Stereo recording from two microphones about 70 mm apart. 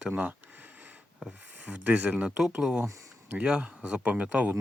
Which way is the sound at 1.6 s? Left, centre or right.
Right.